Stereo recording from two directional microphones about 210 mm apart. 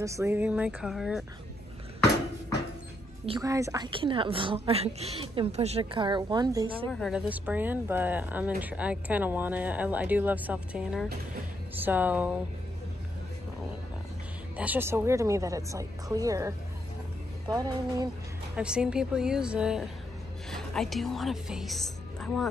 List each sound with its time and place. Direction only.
0.0 s speech: 15° right (ahead or behind)
3.3 s a woman's voice: 15° right (ahead or behind)
6.9 s speech: centre (ahead or behind)
14.6 s speech: 10° right (ahead or behind)
18.6 s a woman's voice: 5° right (ahead or behind)